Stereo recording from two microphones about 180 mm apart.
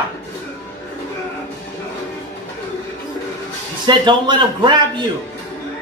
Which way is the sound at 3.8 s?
25° right (ahead or behind).